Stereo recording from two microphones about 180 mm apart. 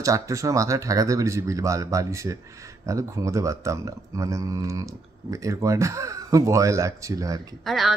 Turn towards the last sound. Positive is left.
turn(degrees=0)  # may be behind; listen again after turning